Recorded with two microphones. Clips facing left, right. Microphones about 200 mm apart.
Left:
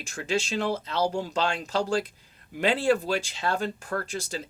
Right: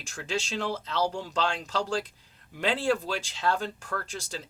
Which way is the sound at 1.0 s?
45° left (ahead or behind).